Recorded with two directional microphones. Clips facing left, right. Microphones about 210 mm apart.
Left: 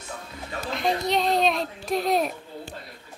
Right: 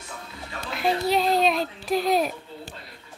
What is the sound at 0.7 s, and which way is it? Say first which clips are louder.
A child's voice: right 2 dB; 5° right (ahead or behind).